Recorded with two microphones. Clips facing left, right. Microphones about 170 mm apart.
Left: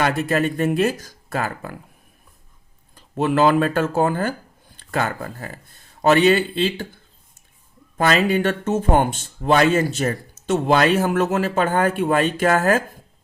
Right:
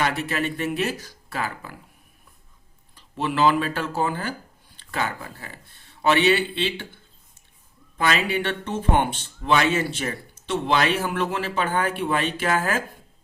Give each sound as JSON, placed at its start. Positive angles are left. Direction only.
{"t": 0.0, "sound": "speech", "side_deg": 45}
{"t": 2.9, "sound": "speech", "side_deg": 50}